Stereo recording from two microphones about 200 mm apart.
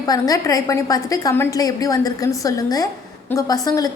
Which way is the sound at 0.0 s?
20° left (ahead or behind).